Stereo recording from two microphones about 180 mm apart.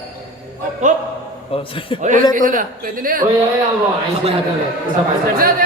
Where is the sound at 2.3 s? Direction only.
50° right (ahead or behind).